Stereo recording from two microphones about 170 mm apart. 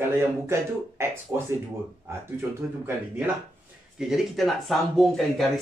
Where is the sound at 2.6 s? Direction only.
15° right (ahead or behind).